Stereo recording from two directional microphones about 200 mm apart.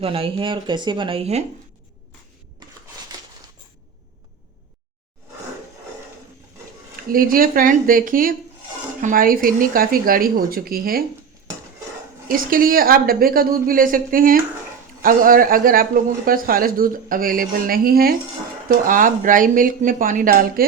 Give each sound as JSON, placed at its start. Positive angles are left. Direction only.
{"t": 0.0, "sound": "speech", "side_deg": -25}
{"t": 2.6, "sound": "a sound", "side_deg": -20}
{"t": 7.1, "sound": "a man's voice", "side_deg": -45}
{"t": 12.3, "sound": "a man's voice", "side_deg": -45}